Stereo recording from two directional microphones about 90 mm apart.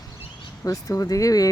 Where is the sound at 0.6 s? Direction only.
40° left (ahead or behind).